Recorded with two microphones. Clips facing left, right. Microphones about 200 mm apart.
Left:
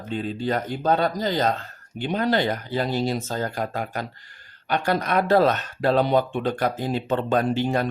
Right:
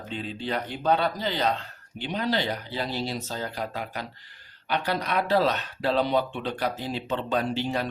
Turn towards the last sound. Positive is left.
turn(degrees=50)  # may be behind; listen again after turning